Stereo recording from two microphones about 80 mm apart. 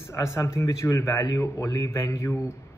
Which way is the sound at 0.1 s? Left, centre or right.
Left.